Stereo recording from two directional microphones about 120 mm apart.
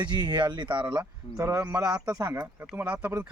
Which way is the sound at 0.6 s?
15° right (ahead or behind).